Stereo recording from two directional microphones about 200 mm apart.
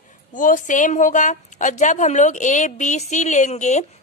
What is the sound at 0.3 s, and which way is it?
Speech, 40° left (ahead or behind).